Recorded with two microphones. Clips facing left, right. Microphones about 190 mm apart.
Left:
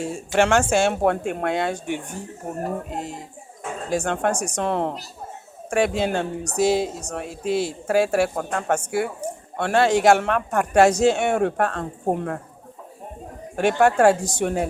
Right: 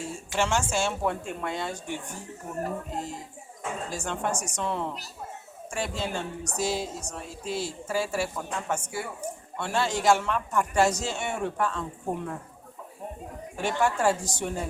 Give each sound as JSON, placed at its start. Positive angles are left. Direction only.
{"t": 0.0, "sound": "speech", "side_deg": 65}
{"t": 13.6, "sound": "speech", "side_deg": 65}